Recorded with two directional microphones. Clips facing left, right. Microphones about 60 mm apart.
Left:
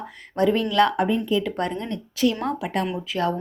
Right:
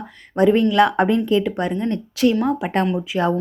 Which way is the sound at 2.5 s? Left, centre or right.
Right.